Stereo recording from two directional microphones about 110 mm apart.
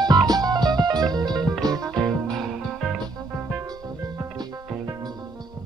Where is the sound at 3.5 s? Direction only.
30° right (ahead or behind).